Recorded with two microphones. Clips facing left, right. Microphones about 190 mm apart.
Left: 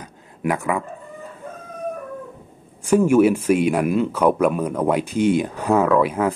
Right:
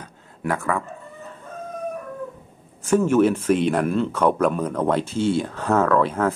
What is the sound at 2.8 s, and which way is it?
Speech, 10° left (ahead or behind).